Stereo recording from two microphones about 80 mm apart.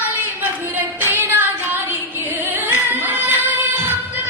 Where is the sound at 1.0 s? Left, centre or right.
Right.